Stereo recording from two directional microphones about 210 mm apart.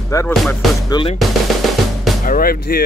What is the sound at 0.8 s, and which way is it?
Speech, 20° left (ahead or behind).